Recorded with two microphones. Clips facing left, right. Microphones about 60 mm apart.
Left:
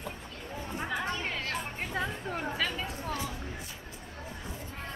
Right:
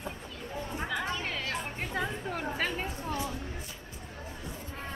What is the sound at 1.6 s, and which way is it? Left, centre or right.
Music, centre.